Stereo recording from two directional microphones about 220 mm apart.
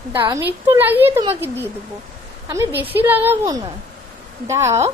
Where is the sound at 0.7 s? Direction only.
10° right (ahead or behind).